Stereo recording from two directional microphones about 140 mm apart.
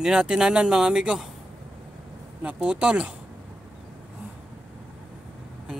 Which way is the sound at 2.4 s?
5° right (ahead or behind).